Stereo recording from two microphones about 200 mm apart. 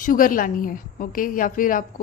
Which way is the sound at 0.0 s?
45° left (ahead or behind).